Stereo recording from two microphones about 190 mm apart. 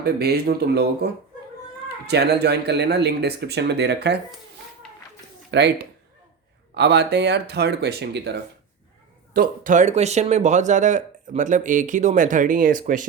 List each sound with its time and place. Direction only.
0.0 s speech: 55° right (ahead or behind)
5.5 s speech: 65° right (ahead or behind)
9.3 s speech: 45° right (ahead or behind)